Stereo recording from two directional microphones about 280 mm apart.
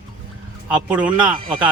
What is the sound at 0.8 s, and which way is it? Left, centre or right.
Speech, centre.